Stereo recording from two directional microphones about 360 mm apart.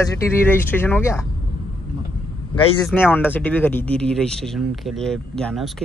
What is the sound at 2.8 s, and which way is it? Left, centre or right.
Speech, centre.